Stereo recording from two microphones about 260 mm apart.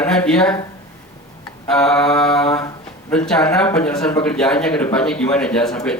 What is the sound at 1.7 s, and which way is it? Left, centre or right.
A man's voice, centre.